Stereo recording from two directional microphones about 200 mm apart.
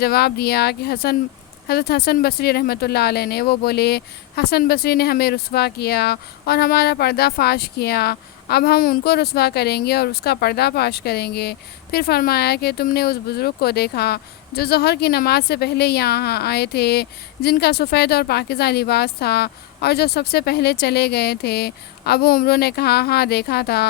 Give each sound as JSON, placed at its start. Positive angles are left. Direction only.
{"t": 0.0, "sound": "speech", "side_deg": 50}